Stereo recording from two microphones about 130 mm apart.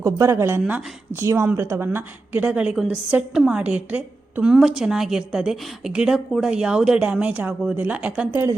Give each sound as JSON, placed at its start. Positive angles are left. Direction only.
{"t": 0.0, "sound": "speech", "side_deg": -20}
{"t": 0.6, "sound": "a woman's voice", "side_deg": -5}
{"t": 1.1, "sound": "a woman's voice", "side_deg": -20}